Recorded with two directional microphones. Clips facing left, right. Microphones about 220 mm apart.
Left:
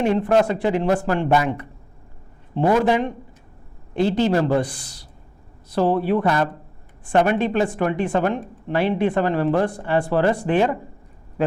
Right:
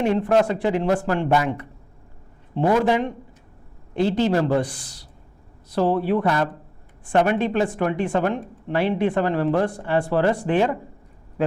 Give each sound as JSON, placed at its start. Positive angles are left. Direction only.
{"t": 0.0, "sound": "speech", "side_deg": 15}
{"t": 2.8, "sound": "speech", "side_deg": 15}